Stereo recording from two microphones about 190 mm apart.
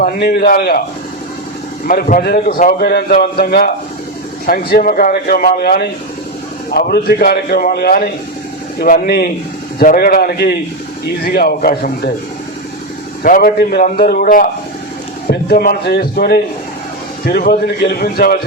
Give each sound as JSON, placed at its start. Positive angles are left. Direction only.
{"t": 0.0, "sound": "a man's voice", "side_deg": 55}
{"t": 1.9, "sound": "a man's voice", "side_deg": 45}
{"t": 13.2, "sound": "a man's voice", "side_deg": 45}